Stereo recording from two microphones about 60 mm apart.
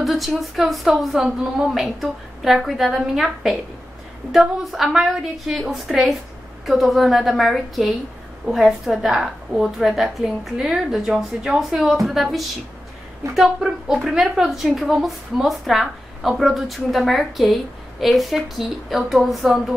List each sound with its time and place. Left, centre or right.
0.0 s a woman's voice: centre